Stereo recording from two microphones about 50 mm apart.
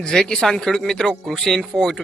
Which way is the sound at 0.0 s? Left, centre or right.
Centre.